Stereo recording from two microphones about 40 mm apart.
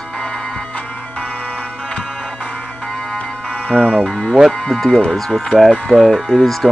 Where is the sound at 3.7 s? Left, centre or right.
Right.